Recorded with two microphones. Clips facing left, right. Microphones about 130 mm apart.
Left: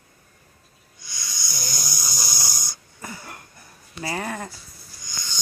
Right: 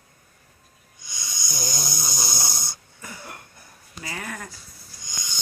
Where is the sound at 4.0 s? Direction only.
35° left (ahead or behind).